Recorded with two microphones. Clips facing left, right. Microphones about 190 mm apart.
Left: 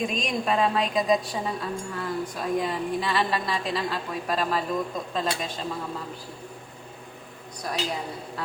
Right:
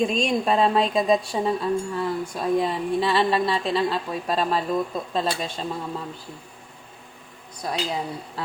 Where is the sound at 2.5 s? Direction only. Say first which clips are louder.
Right 3 dB; 30° right (ahead or behind).